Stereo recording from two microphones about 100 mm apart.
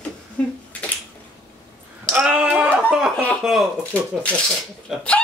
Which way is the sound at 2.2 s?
10° right (ahead or behind).